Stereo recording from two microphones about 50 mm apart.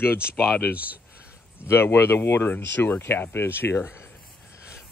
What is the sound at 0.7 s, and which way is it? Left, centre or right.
Speech, right.